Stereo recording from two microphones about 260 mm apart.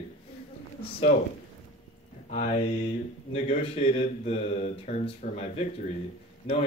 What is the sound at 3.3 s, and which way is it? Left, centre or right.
Speech, left.